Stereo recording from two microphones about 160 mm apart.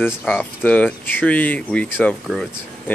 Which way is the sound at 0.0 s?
5° left (ahead or behind).